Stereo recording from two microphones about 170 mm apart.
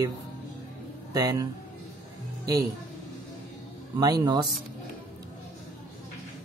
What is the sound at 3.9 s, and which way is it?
Speech, 25° right (ahead or behind).